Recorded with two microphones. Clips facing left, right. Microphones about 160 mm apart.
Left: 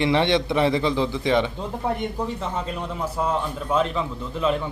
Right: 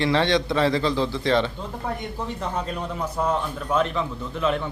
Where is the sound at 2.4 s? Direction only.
Centre (ahead or behind).